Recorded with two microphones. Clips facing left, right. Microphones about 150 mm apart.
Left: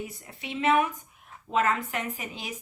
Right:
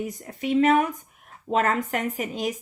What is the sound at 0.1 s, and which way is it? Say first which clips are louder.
Speech: right 13 dB; 45° right (ahead or behind).